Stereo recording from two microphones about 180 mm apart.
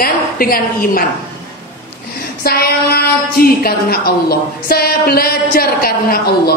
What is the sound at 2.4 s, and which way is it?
A woman's voice, 60° left (ahead or behind).